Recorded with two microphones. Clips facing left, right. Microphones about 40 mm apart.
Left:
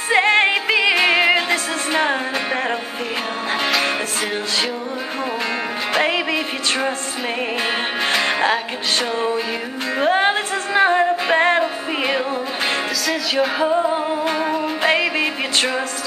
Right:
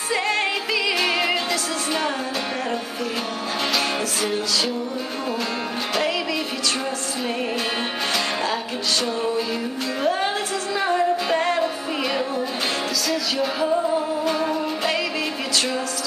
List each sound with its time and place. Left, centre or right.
0.1 s music: left
5.9 s music: left
8.1 s music: left
10.0 s music: left
13.6 s music: left